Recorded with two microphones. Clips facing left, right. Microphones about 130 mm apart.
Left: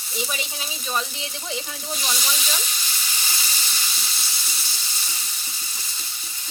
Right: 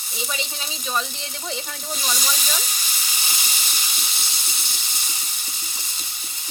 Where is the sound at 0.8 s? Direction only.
Centre (ahead or behind); by 6.0 s 20° right (ahead or behind).